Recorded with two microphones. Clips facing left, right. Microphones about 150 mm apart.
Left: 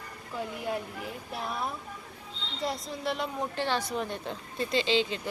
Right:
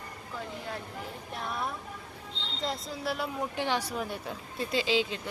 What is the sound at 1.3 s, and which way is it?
A woman's voice, centre (ahead or behind).